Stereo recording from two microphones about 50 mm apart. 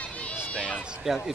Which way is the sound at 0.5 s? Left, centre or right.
Left.